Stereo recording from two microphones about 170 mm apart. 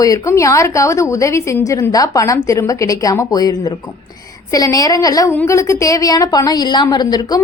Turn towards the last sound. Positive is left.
turn(degrees=25)  # may be behind; listen again after turning